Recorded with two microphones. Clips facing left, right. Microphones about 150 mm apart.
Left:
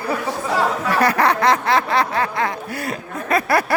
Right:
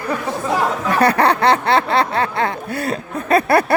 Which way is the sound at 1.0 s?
30° right (ahead or behind).